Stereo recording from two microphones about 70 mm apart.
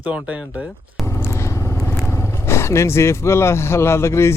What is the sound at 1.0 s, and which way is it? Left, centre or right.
Vehicle, left.